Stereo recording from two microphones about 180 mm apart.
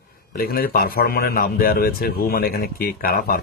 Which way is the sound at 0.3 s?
55° left (ahead or behind).